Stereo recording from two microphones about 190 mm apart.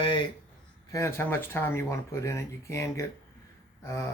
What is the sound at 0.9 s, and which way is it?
Speech, 15° left (ahead or behind).